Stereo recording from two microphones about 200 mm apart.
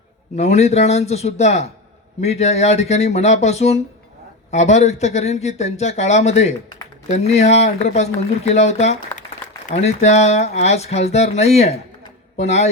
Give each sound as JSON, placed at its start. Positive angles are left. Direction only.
{"t": 0.3, "sound": "speech", "side_deg": 35}